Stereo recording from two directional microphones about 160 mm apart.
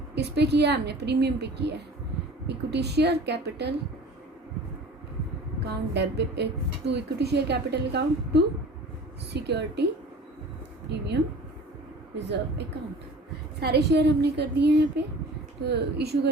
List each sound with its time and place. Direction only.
0.1 s speech: 90° right
5.5 s speech: 90° right
10.8 s speech: 90° right